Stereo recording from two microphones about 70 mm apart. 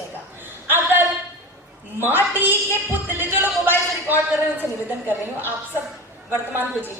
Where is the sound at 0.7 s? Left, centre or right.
Right.